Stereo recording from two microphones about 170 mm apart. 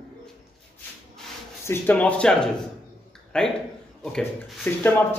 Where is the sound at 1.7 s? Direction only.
10° left (ahead or behind).